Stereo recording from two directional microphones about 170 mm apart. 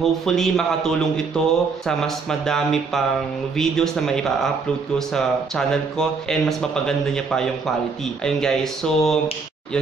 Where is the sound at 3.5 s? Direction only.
5° left (ahead or behind).